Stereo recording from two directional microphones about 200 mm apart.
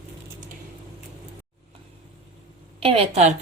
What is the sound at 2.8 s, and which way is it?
Speech, 30° right (ahead or behind).